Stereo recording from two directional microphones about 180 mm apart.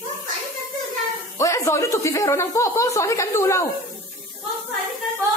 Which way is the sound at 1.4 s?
15° left (ahead or behind).